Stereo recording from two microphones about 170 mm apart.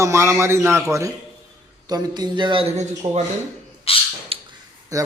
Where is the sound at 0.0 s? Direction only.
15° right (ahead or behind); by 3.1 s 35° right (ahead or behind).